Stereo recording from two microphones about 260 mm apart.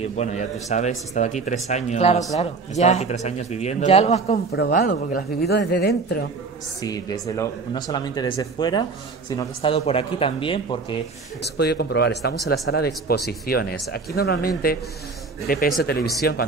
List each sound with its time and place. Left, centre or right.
0.0 s speech: left
4.5 s a woman's voice: left
6.8 s speech: centre
11.4 s a woman's voice: left